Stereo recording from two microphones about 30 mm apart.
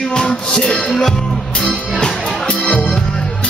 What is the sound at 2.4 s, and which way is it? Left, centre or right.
Music, left.